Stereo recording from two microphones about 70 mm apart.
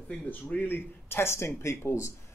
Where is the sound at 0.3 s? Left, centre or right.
Left.